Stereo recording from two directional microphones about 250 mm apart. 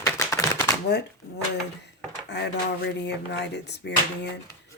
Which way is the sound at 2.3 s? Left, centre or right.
Left.